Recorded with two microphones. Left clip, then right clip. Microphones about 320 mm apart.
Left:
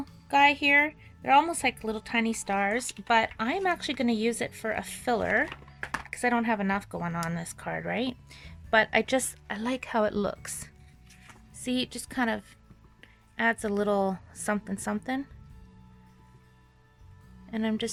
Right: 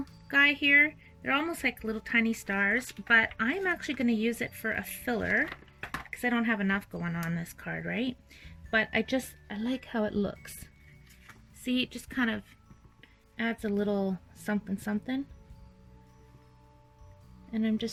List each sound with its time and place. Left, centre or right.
0.3 s a woman's voice: centre
5.2 s speech: left
5.9 s a woman's voice: centre
17.5 s speech: centre